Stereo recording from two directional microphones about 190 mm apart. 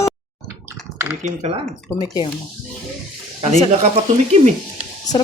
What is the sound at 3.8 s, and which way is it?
Speech, 35° right (ahead or behind).